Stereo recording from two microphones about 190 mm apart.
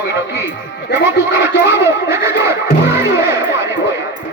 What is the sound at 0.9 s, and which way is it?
Speech, 65° left (ahead or behind).